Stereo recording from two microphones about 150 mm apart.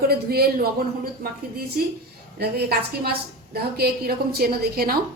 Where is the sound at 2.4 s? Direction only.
90° right.